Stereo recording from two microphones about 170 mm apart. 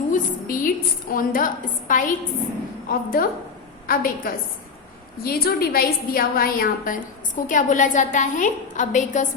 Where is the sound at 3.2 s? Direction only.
60° left (ahead or behind).